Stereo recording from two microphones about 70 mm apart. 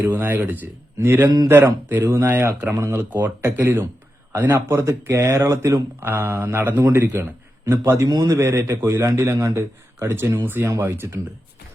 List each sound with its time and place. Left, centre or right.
0.3 s a man's voice: right
3.1 s speech: right
3.4 s a man's voice: right
6.0 s a man's voice: right
10.2 s a man's voice: right